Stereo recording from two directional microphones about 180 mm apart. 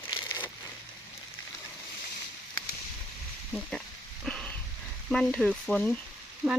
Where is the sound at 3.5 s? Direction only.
5° left (ahead or behind).